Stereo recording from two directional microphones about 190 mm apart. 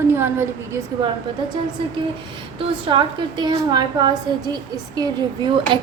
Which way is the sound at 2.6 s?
25° right (ahead or behind).